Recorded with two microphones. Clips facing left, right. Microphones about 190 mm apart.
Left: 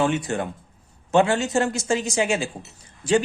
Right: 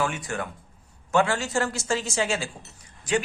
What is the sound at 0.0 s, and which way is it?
Speech, 25° left (ahead or behind).